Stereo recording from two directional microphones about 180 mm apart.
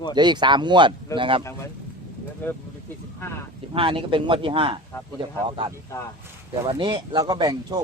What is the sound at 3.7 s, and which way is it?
Speech, 30° right (ahead or behind).